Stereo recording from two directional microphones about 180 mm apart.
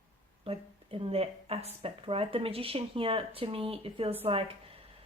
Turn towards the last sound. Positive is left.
turn(degrees=-30)  # may be behind; listen again after turning